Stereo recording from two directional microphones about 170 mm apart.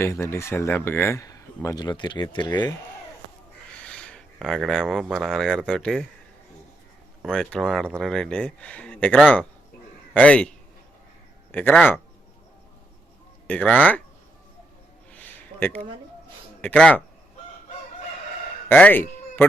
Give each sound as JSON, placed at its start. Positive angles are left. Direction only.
{"t": 0.0, "sound": "speech", "side_deg": 15}
{"t": 3.8, "sound": "speech", "side_deg": 5}
{"t": 7.3, "sound": "speech", "side_deg": 5}
{"t": 11.5, "sound": "speech", "side_deg": 10}
{"t": 13.5, "sound": "speech", "side_deg": 10}
{"t": 15.1, "sound": "a sound", "side_deg": 10}
{"t": 16.6, "sound": "speech", "side_deg": 5}
{"t": 18.7, "sound": "speech", "side_deg": 10}